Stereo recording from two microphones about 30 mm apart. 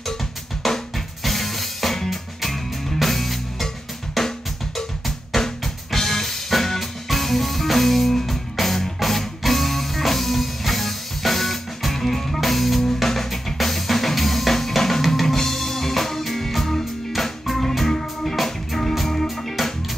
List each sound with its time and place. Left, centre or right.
0.7 s music: centre